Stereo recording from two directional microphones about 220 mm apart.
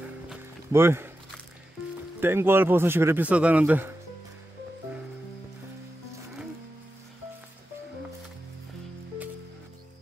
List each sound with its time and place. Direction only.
0.0 s music: 10° right (ahead or behind)
2.1 s speech: 10° right (ahead or behind)